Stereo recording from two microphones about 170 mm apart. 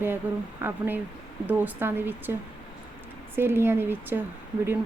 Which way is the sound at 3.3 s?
15° right (ahead or behind).